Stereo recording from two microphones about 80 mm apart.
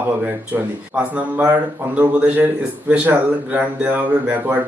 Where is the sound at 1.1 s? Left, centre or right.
Centre.